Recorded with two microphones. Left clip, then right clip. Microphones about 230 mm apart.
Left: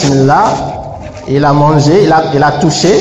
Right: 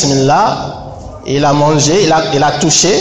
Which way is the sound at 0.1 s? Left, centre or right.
Right.